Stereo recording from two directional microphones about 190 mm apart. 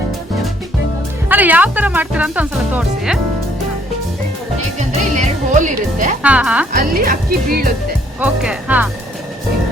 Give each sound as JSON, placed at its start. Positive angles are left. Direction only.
{"t": 1.3, "sound": "speech", "side_deg": -10}
{"t": 5.1, "sound": "speech", "side_deg": -40}
{"t": 6.2, "sound": "speech", "side_deg": -5}
{"t": 6.7, "sound": "speech", "side_deg": -45}
{"t": 8.2, "sound": "speech", "side_deg": -5}